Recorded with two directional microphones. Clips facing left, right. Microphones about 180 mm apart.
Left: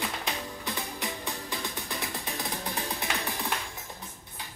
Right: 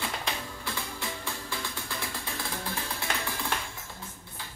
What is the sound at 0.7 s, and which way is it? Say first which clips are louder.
Music: left 1 dB; 15° left (ahead or behind).